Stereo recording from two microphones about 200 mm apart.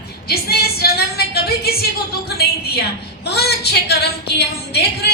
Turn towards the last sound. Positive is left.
turn(degrees=55)  # may be behind; listen again after turning